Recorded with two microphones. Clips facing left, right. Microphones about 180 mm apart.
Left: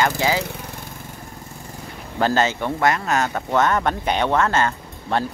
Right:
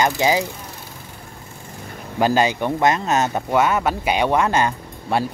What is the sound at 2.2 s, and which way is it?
Speech, 15° right (ahead or behind).